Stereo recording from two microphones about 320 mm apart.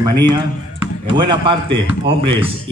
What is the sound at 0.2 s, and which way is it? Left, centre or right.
A man's voice, centre.